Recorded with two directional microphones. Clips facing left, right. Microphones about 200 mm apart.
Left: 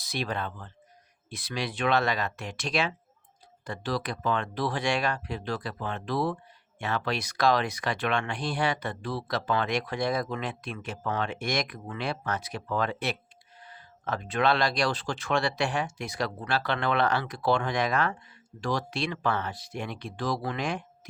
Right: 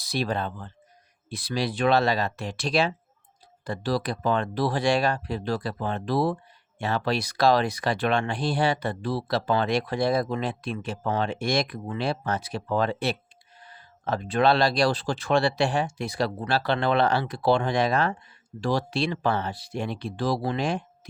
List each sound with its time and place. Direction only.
0.0 s speech: 35° right (ahead or behind)